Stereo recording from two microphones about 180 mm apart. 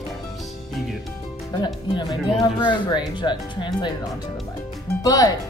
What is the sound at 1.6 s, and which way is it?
A woman's voice, 25° left (ahead or behind).